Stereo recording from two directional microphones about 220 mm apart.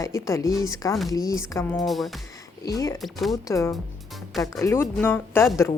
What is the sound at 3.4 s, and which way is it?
Speech, 15° left (ahead or behind).